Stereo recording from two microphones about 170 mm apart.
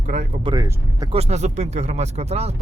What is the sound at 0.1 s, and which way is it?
Speech, 45° right (ahead or behind).